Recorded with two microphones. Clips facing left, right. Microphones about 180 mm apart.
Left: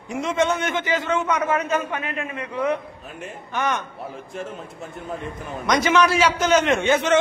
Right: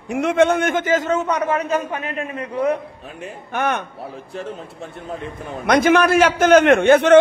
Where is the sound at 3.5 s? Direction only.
55° right (ahead or behind).